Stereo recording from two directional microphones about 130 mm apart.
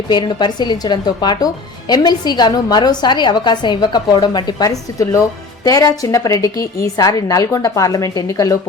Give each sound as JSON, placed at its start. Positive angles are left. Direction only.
{"t": 0.1, "sound": "a woman's voice", "side_deg": 35}